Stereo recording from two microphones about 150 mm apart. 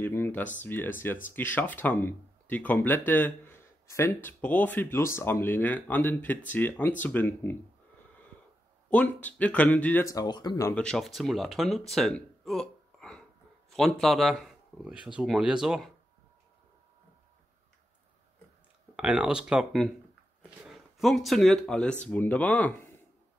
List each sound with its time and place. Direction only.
0.0 s speech: 15° left (ahead or behind)
8.9 s speech: 10° left (ahead or behind)
10.0 s speech: 25° left (ahead or behind)
10.7 s speech: 5° left (ahead or behind)
11.9 s a sound: centre (ahead or behind)
13.7 s speech: centre (ahead or behind)
18.9 s speech: 5° right (ahead or behind)